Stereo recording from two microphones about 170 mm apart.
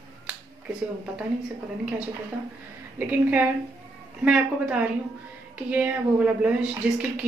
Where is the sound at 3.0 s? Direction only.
10° right (ahead or behind).